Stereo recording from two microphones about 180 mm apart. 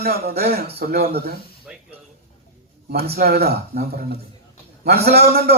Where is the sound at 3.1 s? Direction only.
60° right (ahead or behind).